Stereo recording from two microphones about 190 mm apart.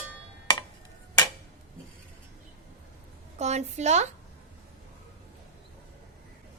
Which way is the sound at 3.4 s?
35° right (ahead or behind).